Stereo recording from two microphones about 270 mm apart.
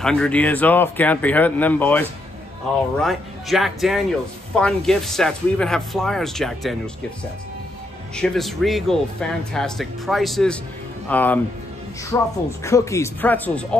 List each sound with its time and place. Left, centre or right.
0.0 s speech: centre
8.2 s speech: centre